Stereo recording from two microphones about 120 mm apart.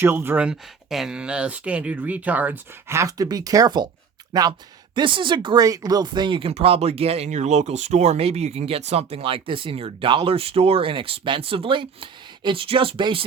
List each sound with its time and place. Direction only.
0.0 s speech: 20° right (ahead or behind); by 6.5 s 45° right (ahead or behind)
6.5 s speech: 55° right (ahead or behind)